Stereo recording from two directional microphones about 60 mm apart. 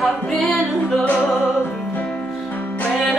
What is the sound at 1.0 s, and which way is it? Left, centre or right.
Music, left.